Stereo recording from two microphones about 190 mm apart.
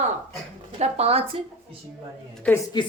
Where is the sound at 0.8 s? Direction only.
30° right (ahead or behind).